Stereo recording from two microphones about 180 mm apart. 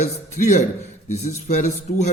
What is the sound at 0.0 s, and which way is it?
A man's voice, 40° left (ahead or behind).